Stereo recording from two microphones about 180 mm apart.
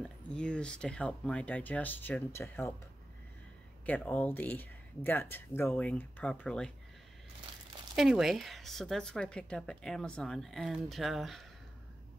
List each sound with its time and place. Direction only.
0.0 s speech: 5° left (ahead or behind)
3.8 s speech: 10° left (ahead or behind)
7.9 s a woman's voice: centre (ahead or behind)